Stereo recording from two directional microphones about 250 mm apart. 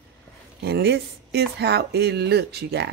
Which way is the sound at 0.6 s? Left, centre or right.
Right.